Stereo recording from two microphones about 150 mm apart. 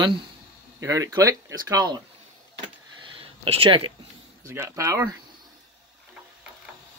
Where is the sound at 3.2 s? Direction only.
35° right (ahead or behind).